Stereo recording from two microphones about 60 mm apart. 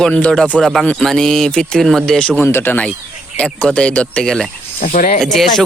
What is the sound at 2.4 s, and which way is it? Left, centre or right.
Speech, left.